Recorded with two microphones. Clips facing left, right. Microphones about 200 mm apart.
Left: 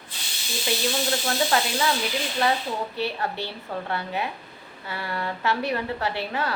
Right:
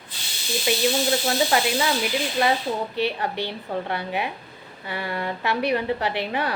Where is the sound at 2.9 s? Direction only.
15° right (ahead or behind).